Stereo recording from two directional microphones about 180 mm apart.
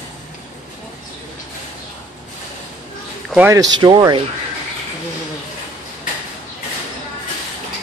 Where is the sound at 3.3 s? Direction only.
10° right (ahead or behind).